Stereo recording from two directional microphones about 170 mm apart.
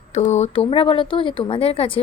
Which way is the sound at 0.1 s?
40° left (ahead or behind).